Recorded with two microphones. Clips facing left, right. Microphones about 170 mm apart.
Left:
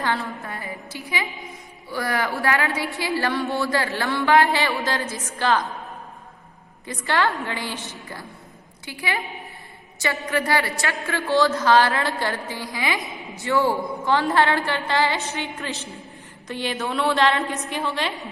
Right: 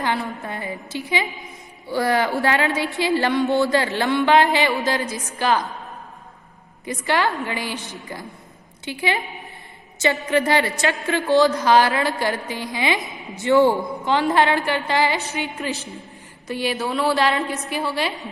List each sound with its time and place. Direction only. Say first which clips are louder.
0.0 s a woman's voice: right 2 dB; 15° right (ahead or behind)
6.8 s a woman's voice: right 1 dB; 15° right (ahead or behind)
8.8 s a woman's voice: right 4 dB; 25° right (ahead or behind)
10.2 s a woman's voice: right 2 dB; 25° right (ahead or behind); by 18.3 s 5° right (ahead or behind)